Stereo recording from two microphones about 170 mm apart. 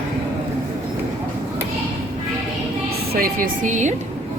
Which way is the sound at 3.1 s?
55° right (ahead or behind).